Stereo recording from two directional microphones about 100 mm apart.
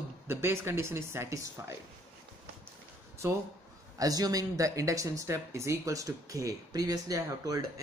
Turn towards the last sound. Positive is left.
turn(degrees=-35)  # may be behind; listen again after turning